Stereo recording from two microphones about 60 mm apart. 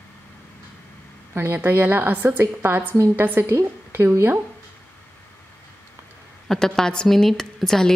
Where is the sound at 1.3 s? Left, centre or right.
Right.